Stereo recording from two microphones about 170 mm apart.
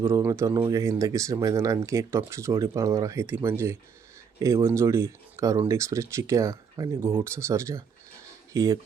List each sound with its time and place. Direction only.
0.0 s speech: 15° right (ahead or behind)